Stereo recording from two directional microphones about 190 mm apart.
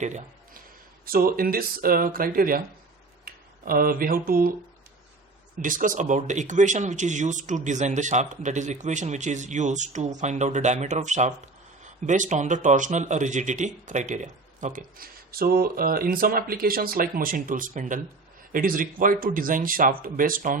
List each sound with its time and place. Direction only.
0.0 s speech: 40° right (ahead or behind)
1.0 s speech: 50° right (ahead or behind)
5.6 s speech: 45° right (ahead or behind)